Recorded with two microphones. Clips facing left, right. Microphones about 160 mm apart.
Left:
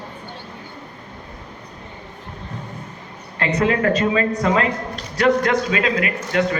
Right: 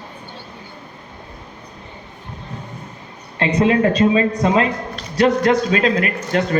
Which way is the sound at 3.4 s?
25° right (ahead or behind).